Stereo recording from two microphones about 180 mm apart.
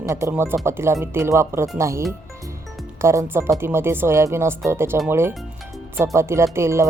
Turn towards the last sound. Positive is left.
turn(degrees=-15)  # may be behind; listen again after turning